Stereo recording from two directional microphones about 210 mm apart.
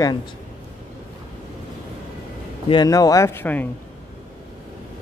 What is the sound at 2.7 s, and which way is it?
Speech, 20° left (ahead or behind).